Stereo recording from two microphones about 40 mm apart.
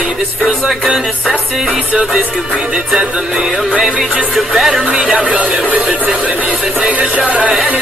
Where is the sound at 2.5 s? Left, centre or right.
Centre.